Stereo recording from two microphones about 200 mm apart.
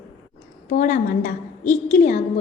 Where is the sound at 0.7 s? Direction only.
40° left (ahead or behind).